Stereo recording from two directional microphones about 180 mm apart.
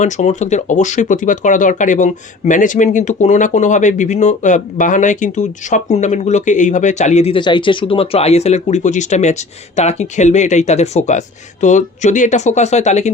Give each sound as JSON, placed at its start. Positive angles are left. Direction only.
{"t": 0.0, "sound": "speech", "side_deg": 40}